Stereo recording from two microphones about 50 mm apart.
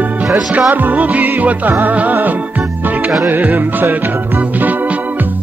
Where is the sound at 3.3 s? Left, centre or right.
Right.